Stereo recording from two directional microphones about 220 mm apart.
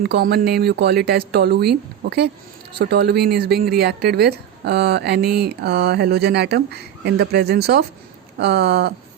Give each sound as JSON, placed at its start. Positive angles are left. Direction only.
{"t": 0.0, "sound": "speech", "side_deg": -45}